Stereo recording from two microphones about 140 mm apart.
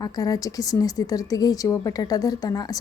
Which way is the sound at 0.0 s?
25° left (ahead or behind).